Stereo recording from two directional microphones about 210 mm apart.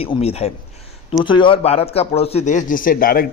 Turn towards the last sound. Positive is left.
turn(degrees=45)  # may be behind; listen again after turning